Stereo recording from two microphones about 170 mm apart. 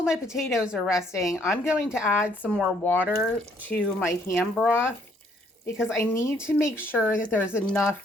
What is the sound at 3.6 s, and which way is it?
Speech, 10° left (ahead or behind).